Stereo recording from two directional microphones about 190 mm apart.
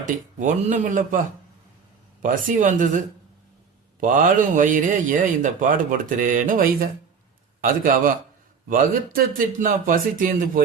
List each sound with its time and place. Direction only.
0.0 s a man's voice: 45° right (ahead or behind)
2.2 s a man's voice: 45° right (ahead or behind)
4.0 s a man's voice: 45° right (ahead or behind)